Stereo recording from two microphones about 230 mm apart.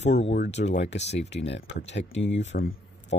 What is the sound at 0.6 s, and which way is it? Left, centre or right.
Speech, left.